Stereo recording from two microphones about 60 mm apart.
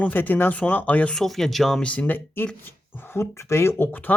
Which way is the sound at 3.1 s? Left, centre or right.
Left.